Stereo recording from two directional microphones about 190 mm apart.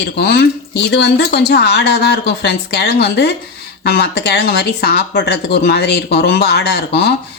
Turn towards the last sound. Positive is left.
turn(degrees=60)  # may be behind; listen again after turning